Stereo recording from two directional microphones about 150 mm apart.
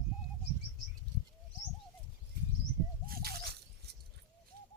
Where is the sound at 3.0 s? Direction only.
90° right.